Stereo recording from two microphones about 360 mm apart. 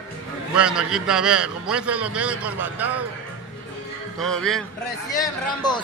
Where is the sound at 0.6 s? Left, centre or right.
Centre.